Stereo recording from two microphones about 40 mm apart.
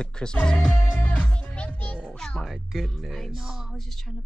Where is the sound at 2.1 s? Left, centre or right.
Centre.